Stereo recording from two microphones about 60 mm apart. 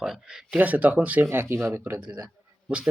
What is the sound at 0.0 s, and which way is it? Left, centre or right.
Speech, centre.